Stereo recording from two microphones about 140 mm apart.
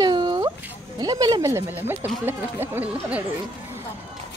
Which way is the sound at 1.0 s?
30° right (ahead or behind).